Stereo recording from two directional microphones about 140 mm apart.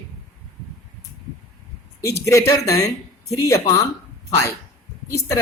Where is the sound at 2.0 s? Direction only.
20° left (ahead or behind).